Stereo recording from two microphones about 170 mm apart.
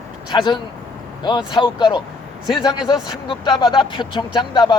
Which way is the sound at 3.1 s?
25° left (ahead or behind).